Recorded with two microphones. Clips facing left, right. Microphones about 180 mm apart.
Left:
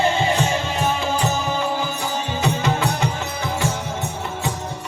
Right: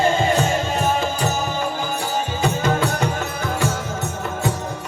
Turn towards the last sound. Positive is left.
turn(degrees=-50)  # may be behind; listen again after turning